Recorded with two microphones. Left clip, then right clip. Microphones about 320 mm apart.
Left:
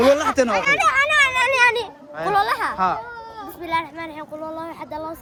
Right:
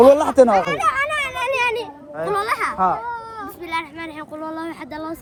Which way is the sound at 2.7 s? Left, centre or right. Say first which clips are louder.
Right 4 dB; centre.